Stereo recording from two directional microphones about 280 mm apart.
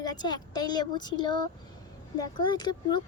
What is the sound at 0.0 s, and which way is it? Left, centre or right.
A child's voice, centre.